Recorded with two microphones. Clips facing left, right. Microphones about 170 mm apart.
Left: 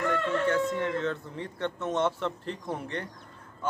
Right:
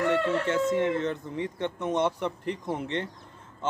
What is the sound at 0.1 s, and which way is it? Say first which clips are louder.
Speech: right 1 dB; 25° right (ahead or behind).